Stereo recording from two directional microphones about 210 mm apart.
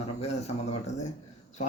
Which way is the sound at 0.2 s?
30° left (ahead or behind).